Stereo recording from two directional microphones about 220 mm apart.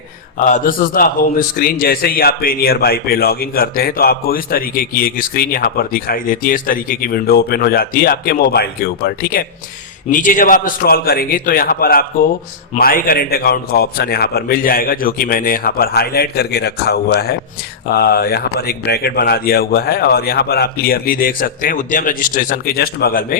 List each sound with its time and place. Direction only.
0.3 s a man's voice: 35° left (ahead or behind)